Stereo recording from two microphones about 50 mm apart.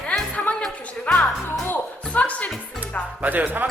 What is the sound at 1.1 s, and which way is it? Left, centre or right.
Speech, left.